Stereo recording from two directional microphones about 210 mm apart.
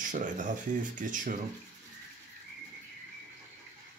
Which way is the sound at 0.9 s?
40° right (ahead or behind).